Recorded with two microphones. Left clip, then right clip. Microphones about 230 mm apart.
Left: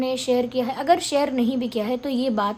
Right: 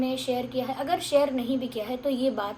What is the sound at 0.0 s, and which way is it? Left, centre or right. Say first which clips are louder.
A woman's voice: left 6 dB; left.